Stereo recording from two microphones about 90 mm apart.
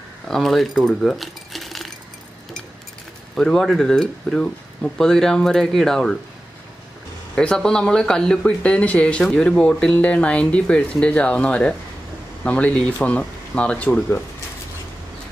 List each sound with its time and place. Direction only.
0.3 s speech: centre (ahead or behind)
3.3 s speech: 5° left (ahead or behind)
7.3 s speech: 10° left (ahead or behind)